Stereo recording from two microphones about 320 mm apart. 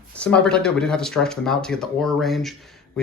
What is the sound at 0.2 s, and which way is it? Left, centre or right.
Speech, centre.